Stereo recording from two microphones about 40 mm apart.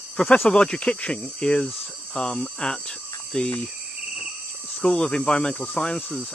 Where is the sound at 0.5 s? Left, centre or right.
Left.